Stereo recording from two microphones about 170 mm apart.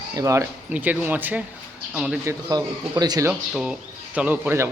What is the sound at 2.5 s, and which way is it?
Speech, 20° right (ahead or behind).